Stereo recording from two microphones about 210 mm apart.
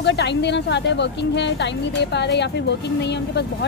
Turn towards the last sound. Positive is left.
turn(degrees=55)  # may be behind; listen again after turning